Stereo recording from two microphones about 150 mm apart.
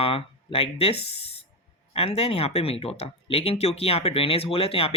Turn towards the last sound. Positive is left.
turn(degrees=40)  # may be behind; listen again after turning